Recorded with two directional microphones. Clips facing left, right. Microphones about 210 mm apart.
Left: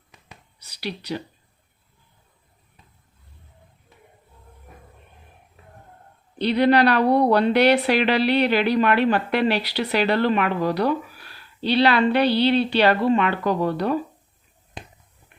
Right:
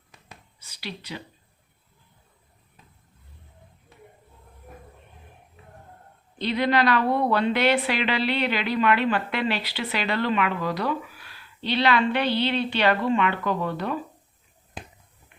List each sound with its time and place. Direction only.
0.6 s a woman's voice: 40° left (ahead or behind)
6.6 s a woman's voice: 35° left (ahead or behind)
14.8 s a sound: centre (ahead or behind)